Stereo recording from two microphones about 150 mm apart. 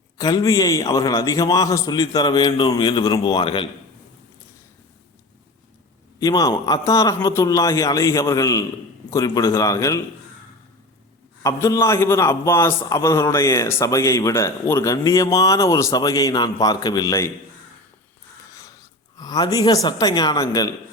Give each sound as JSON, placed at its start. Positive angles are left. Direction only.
{"t": 0.2, "sound": "a man's voice", "side_deg": 25}
{"t": 6.1, "sound": "a man's voice", "side_deg": 25}
{"t": 11.4, "sound": "a man's voice", "side_deg": 20}
{"t": 18.5, "sound": "speech", "side_deg": 20}